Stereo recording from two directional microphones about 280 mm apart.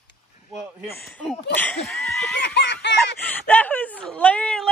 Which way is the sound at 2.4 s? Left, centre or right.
Left.